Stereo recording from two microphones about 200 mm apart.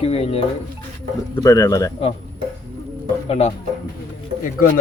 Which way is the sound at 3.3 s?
30° left (ahead or behind).